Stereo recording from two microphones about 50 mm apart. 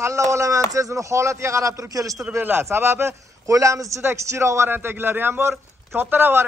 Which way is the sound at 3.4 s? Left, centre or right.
Right.